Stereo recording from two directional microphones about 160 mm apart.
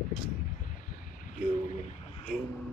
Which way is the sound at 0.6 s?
60° left (ahead or behind).